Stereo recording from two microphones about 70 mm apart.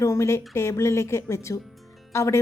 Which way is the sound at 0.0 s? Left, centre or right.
Left.